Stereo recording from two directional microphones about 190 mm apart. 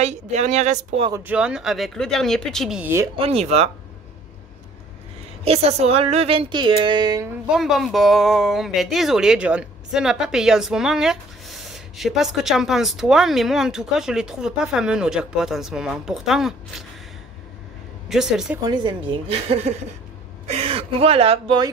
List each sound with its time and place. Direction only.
0.0 s a woman's voice: 35° right (ahead or behind)
1.1 s speech: 10° right (ahead or behind)
3.2 s a woman's voice: 35° right (ahead or behind)
5.4 s a woman's voice: 35° right (ahead or behind)
7.4 s speech: centre (ahead or behind)
18.0 s speech: centre (ahead or behind)
18.6 s a woman's voice: 25° right (ahead or behind)